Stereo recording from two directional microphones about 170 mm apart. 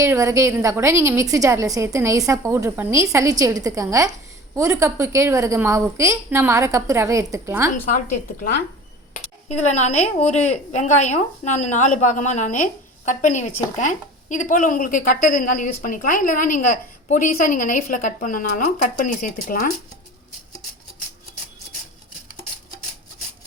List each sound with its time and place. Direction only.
0.0 s a woman's voice: 15° right (ahead or behind)
9.1 s a woman's voice: 40° left (ahead or behind)